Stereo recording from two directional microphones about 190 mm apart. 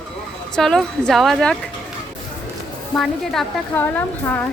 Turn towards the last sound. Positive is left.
turn(degrees=10)  # may be behind; listen again after turning